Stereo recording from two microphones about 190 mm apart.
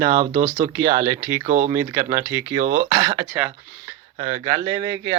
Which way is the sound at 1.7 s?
15° right (ahead or behind).